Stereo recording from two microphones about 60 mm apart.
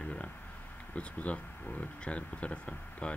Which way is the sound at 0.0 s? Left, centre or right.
Left.